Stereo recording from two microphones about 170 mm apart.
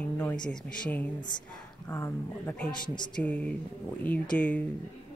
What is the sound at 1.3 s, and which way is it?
Speech, 25° left (ahead or behind).